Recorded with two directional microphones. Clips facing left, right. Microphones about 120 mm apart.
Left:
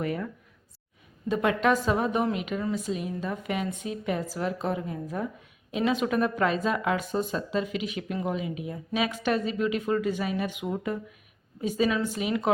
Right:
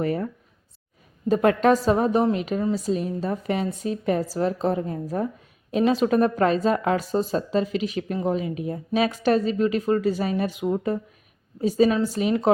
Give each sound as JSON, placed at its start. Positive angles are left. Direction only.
{"t": 0.0, "sound": "speech", "side_deg": -35}
{"t": 1.3, "sound": "speech", "side_deg": -40}